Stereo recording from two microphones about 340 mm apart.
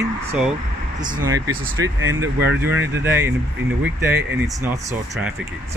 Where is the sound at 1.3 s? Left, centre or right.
Centre.